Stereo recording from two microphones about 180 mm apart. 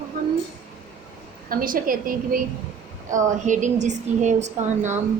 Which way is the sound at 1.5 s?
50° right (ahead or behind).